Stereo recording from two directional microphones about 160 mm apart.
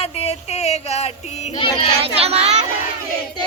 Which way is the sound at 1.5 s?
35° left (ahead or behind).